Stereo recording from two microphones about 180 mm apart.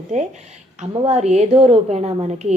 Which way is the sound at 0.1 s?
40° right (ahead or behind).